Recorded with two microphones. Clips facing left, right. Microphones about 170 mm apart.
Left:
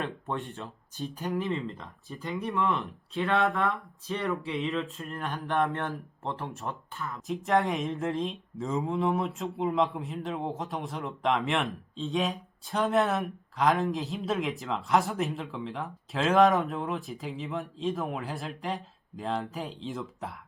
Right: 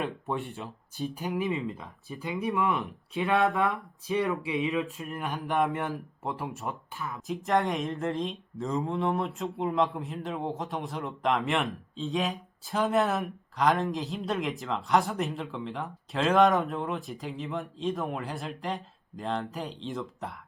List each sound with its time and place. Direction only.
0.0 s speech: 5° right (ahead or behind)
2.6 s speech: 15° right (ahead or behind)
5.5 s speech: centre (ahead or behind)